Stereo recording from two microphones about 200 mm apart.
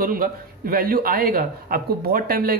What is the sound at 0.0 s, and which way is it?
A man's voice, 45° right (ahead or behind).